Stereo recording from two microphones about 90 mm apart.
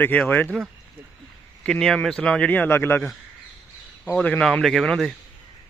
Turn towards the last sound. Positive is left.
turn(degrees=5)  # may be behind; listen again after turning